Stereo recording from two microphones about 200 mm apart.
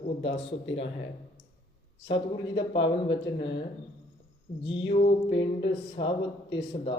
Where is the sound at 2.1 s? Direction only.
25° left (ahead or behind).